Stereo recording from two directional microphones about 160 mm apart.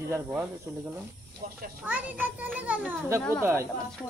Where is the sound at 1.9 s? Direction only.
10° right (ahead or behind).